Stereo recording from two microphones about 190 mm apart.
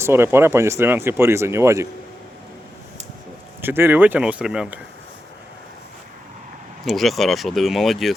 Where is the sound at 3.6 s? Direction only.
10° right (ahead or behind).